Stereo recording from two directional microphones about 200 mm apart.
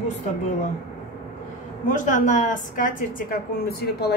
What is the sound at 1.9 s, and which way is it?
A woman's voice, 40° left (ahead or behind).